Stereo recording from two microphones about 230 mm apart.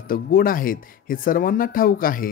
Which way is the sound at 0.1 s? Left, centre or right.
Left.